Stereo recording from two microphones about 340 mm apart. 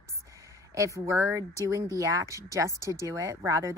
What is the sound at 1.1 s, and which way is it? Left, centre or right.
A woman's voice, centre.